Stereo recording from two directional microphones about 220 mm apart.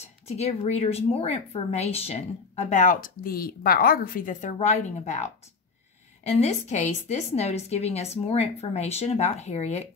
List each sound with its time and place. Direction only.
0.3 s a woman's voice: 30° left (ahead or behind)